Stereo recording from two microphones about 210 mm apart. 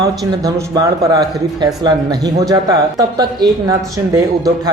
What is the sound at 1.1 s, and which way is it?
Speech, 20° right (ahead or behind).